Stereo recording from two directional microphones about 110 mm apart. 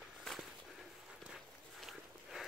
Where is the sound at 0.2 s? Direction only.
Centre (ahead or behind).